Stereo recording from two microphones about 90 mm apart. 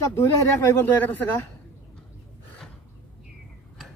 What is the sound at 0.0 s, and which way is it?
A man's voice, 30° left (ahead or behind).